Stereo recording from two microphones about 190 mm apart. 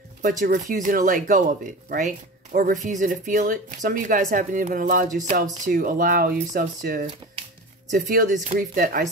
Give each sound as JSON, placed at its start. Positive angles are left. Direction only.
{"t": 0.4, "sound": "speech", "side_deg": -40}